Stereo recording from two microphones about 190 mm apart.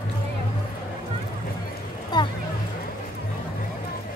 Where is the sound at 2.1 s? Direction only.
20° left (ahead or behind).